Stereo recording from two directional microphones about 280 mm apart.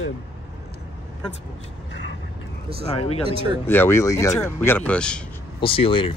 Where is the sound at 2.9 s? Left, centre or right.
Left.